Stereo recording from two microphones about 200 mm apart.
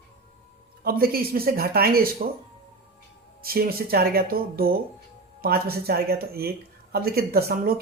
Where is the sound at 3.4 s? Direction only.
50° right (ahead or behind).